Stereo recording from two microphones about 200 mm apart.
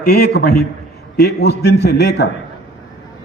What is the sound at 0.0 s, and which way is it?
A man's voice, 50° left (ahead or behind).